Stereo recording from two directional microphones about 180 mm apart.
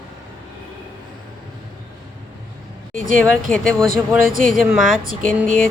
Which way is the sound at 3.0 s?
45° right (ahead or behind).